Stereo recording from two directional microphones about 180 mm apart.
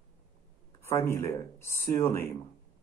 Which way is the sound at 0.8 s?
15° left (ahead or behind).